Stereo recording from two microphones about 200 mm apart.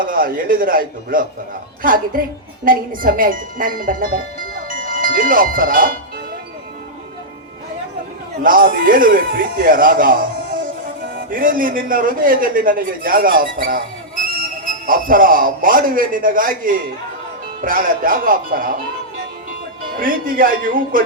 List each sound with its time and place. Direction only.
0.0 s a man's voice: 45° right (ahead or behind)
8.4 s a man's voice: 45° right (ahead or behind)
20.0 s a man's voice: 45° right (ahead or behind)